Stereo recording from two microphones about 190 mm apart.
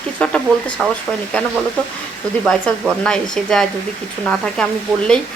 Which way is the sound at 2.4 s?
5° left (ahead or behind).